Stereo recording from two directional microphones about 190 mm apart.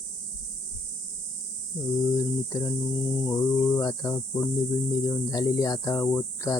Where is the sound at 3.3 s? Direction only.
20° left (ahead or behind).